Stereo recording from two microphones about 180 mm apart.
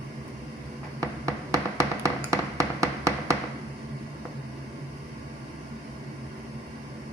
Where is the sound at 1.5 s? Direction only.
15° right (ahead or behind).